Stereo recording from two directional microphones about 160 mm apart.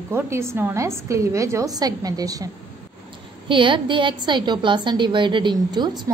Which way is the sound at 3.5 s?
30° right (ahead or behind).